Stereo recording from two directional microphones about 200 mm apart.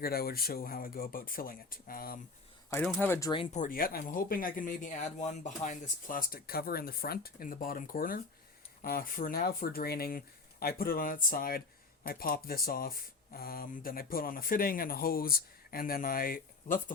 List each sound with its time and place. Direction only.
0.0 s speech: 50° left (ahead or behind)
2.6 s speech: 10° left (ahead or behind)
3.6 s speech: 45° left (ahead or behind)